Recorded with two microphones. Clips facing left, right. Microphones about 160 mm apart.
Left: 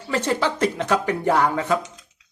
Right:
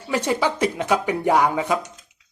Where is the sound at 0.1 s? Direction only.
10° right (ahead or behind).